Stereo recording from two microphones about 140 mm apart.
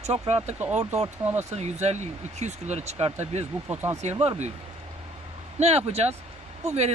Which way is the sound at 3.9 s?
50° right (ahead or behind).